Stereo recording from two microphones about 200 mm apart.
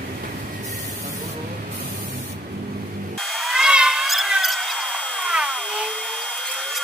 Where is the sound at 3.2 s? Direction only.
Centre (ahead or behind).